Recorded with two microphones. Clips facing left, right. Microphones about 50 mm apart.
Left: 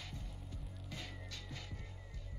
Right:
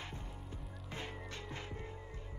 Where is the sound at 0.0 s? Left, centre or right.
Right.